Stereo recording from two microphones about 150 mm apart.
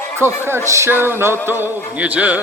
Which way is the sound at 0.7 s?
15° right (ahead or behind).